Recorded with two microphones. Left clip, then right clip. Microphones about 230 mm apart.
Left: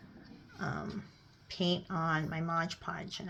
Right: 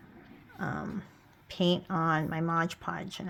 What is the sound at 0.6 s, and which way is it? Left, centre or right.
Speech, right.